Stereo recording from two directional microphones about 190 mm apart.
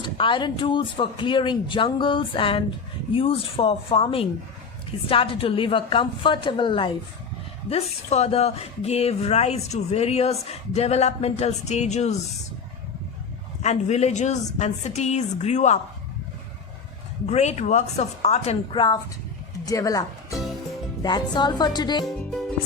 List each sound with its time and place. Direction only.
0.0 s speech: 25° left (ahead or behind)
13.6 s speech: 35° left (ahead or behind)
17.2 s speech: 35° left (ahead or behind)
22.0 s speech: centre (ahead or behind)